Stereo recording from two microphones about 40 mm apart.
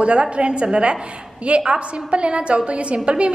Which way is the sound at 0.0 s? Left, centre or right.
Right.